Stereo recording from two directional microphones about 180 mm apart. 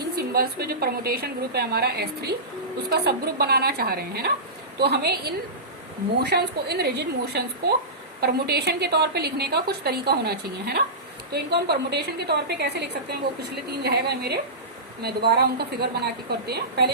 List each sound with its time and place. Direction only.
0.2 s a woman's voice: 60° right (ahead or behind)